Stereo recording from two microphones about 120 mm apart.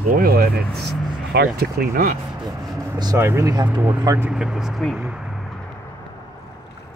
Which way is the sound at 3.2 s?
20° right (ahead or behind).